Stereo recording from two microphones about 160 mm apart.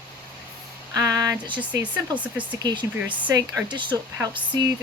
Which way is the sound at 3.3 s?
25° right (ahead or behind).